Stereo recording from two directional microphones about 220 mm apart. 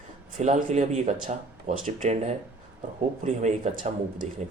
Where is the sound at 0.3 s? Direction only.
30° right (ahead or behind).